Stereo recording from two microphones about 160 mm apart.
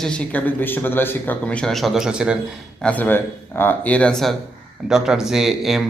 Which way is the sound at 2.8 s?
10° left (ahead or behind).